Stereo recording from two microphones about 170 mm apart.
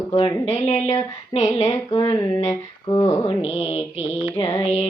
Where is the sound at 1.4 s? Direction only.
35° left (ahead or behind).